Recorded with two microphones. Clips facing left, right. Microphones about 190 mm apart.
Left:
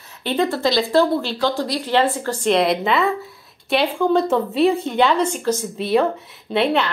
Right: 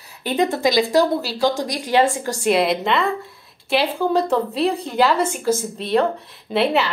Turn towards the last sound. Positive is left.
turn(degrees=0)  # may be behind; listen again after turning